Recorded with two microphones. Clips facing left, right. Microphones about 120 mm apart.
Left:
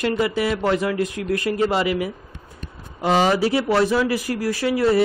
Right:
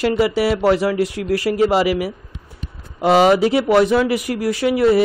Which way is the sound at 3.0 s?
15° right (ahead or behind).